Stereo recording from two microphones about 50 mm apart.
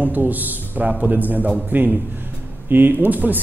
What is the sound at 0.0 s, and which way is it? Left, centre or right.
A man's voice, right.